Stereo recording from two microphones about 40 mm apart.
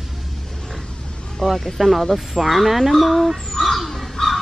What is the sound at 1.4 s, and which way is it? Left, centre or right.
Speech, centre.